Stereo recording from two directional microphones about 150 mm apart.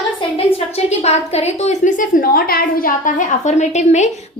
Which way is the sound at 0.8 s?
45° left (ahead or behind).